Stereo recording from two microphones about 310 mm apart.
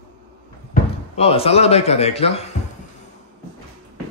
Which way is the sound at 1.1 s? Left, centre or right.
Centre.